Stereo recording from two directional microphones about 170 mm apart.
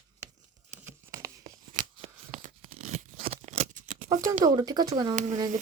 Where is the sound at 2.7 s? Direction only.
45° right (ahead or behind).